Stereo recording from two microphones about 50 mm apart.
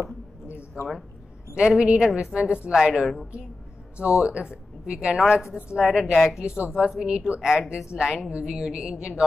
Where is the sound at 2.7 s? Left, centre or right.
Centre.